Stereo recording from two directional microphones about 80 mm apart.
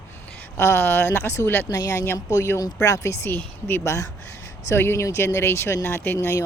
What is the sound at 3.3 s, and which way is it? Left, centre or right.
Speech, left.